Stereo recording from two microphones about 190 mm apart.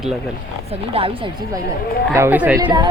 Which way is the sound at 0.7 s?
30° right (ahead or behind).